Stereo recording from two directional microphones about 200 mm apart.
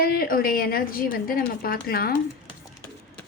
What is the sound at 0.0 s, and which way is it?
A woman's voice, 50° left (ahead or behind).